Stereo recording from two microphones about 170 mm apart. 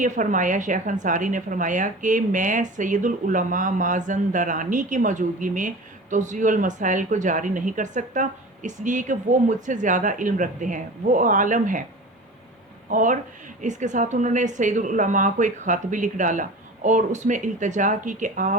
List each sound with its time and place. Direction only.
0.0 s a woman's voice: 50° right (ahead or behind)
12.9 s a woman's voice: 50° right (ahead or behind)